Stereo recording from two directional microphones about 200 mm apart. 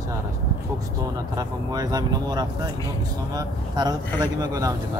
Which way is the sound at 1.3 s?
20° right (ahead or behind).